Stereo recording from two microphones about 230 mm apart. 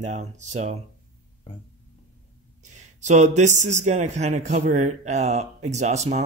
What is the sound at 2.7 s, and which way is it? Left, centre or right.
A man's voice, right.